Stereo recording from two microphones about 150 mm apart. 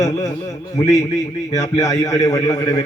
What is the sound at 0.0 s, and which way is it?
Speech, 20° left (ahead or behind).